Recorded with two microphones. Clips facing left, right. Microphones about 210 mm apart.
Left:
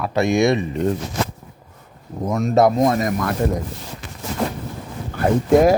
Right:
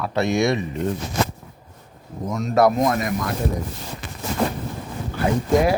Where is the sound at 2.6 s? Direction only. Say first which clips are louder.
Left 2 dB; 25° left (ahead or behind).